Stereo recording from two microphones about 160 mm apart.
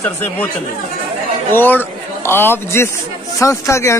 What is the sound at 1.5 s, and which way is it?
A man's voice, 10° left (ahead or behind).